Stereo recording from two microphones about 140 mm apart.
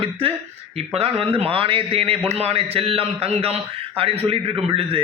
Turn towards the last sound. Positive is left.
turn(degrees=-40)  # may be behind; listen again after turning